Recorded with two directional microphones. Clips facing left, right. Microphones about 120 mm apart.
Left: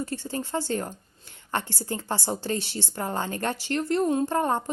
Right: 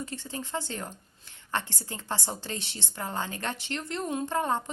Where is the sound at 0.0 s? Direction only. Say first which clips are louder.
Left 6 dB; 45° left (ahead or behind).